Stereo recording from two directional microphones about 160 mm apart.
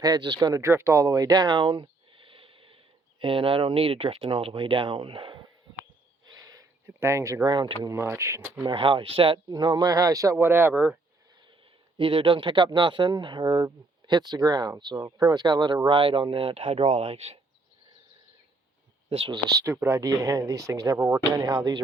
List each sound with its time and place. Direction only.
0.0 s speech: 25° right (ahead or behind)
6.2 s a sound: 25° right (ahead or behind)
7.9 s speech: 15° right (ahead or behind)
8.6 s speech: 35° right (ahead or behind); by 10.9 s 10° right (ahead or behind)
11.9 s speech: 35° right (ahead or behind)
19.1 s speech: 30° right (ahead or behind)